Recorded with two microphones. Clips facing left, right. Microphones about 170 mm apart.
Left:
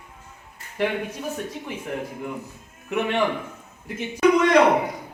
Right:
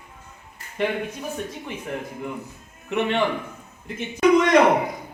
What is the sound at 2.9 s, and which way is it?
Speech, 10° left (ahead or behind).